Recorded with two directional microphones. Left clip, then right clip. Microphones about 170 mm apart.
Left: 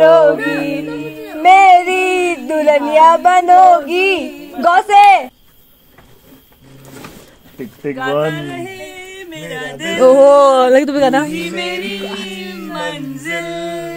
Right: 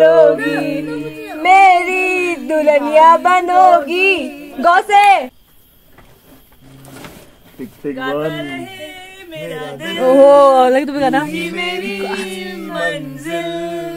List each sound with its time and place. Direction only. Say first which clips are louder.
0.0 s a capella: left 1 dB; 30° left (ahead or behind)
1.4 s a sound: left 2 dB; 25° left (ahead or behind)
4.6 s speech: left 2 dB; 35° left (ahead or behind)
7.9 s speech: left 2 dB; 90° left
9.1 s yodeling: even; 25° left (ahead or behind)
9.9 s a sound: left 1 dB; 65° left (ahead or behind)
10.7 s speech: left 3 dB; 35° left (ahead or behind)
11.2 s chant: even; centre (ahead or behind)
12.0 s music: right 3 dB; 60° right (ahead or behind)
13.3 s a capella: even; 5° left (ahead or behind)